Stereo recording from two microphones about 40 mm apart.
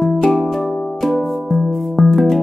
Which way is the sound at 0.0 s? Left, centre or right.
Centre.